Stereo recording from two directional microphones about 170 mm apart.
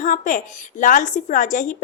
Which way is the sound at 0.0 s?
45° left (ahead or behind).